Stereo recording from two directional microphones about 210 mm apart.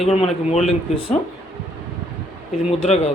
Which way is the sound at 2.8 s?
30° left (ahead or behind).